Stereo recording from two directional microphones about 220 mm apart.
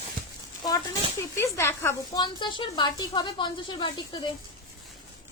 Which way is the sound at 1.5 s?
10° left (ahead or behind).